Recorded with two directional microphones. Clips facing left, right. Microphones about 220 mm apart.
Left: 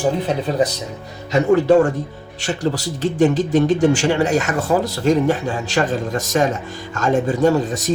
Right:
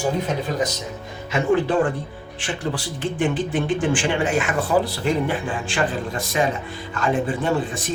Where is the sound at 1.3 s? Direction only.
45° left (ahead or behind).